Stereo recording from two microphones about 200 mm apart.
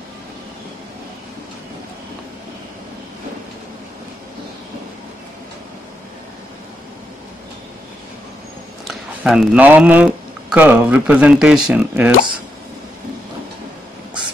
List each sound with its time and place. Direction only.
8.8 s speech: centre (ahead or behind)